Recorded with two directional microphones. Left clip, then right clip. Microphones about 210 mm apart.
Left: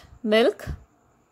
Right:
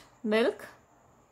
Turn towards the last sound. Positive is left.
turn(degrees=25)  # may be behind; listen again after turning